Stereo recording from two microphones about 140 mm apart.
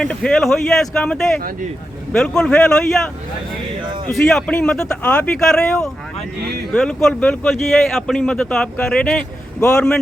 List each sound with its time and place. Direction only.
0.0 s speech: 5° left (ahead or behind)
4.1 s speech: centre (ahead or behind)